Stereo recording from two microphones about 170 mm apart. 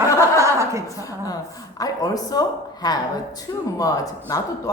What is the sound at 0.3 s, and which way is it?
Chuckle, 15° right (ahead or behind).